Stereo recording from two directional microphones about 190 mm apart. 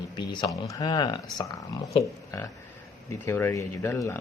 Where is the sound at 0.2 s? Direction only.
25° left (ahead or behind).